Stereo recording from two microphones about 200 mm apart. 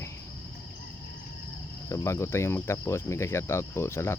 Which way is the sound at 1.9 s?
15° left (ahead or behind).